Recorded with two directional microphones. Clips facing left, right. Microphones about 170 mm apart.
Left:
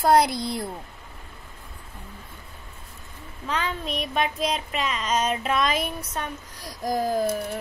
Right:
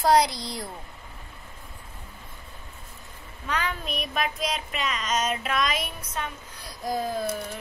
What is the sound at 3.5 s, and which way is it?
Child singing, 25° left (ahead or behind).